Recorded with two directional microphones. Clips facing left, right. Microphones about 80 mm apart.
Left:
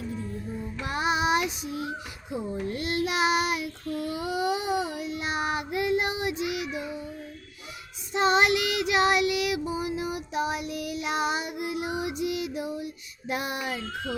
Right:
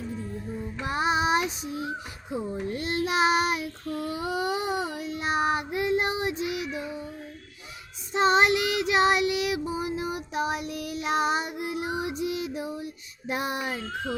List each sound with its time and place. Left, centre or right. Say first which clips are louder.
0.8 s child singing: right 1 dB; right
8.1 s child singing: right 1 dB; right